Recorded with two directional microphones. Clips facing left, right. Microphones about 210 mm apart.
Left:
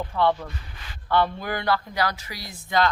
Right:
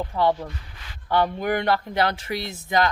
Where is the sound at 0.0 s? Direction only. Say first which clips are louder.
Right 1 dB; 15° right (ahead or behind).